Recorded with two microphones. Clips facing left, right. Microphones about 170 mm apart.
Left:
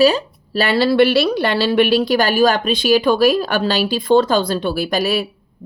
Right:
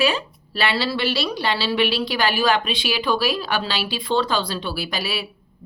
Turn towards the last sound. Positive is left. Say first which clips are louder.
# left 9 dB
turn(degrees=45)  # may be behind; listen again after turning